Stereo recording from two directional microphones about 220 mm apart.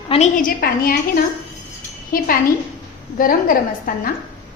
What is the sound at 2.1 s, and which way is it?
A woman's voice, 40° left (ahead or behind).